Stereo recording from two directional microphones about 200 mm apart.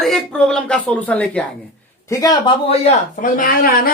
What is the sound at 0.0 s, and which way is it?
Speech, centre (ahead or behind).